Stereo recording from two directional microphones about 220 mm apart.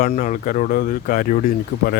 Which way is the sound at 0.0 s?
35° left (ahead or behind).